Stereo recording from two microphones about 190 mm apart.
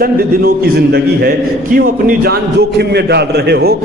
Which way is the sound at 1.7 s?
50° right (ahead or behind).